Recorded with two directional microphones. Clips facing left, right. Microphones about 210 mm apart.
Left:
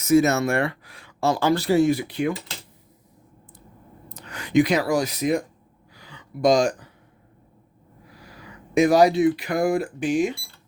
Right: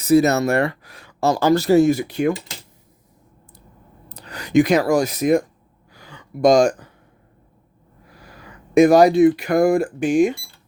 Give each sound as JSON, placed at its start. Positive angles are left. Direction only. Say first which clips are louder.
{"t": 0.0, "sound": "speech", "louder": "right 3 dB", "side_deg": -35}
{"t": 4.1, "sound": "speech", "louder": "right 3 dB", "side_deg": -35}
{"t": 5.9, "sound": "a sound", "louder": "right 3 dB", "side_deg": -50}
{"t": 8.7, "sound": "speech", "louder": "right 5 dB", "side_deg": -50}